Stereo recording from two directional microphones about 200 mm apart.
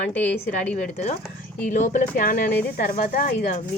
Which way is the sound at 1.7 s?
40° left (ahead or behind).